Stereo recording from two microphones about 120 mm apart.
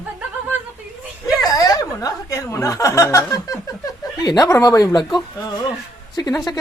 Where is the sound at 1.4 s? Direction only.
30° left (ahead or behind).